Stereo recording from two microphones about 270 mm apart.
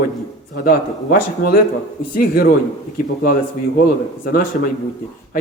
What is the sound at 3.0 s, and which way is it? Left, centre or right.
Speech, left.